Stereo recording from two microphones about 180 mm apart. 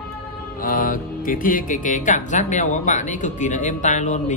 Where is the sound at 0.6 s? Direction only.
50° left (ahead or behind).